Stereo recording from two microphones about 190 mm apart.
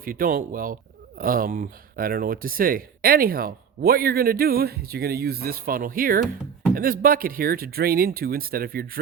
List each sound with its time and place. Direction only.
0.0 s speech: 50° right (ahead or behind)